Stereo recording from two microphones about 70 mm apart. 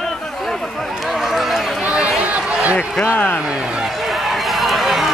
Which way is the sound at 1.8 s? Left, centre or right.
Centre.